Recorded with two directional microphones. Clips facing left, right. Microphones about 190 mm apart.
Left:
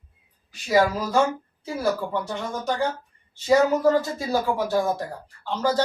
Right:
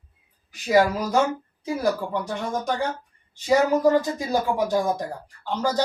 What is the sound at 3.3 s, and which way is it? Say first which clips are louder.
Speech: left 1 dB; 15° right (ahead or behind).